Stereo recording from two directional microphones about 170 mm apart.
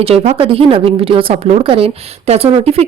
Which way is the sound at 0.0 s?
35° right (ahead or behind).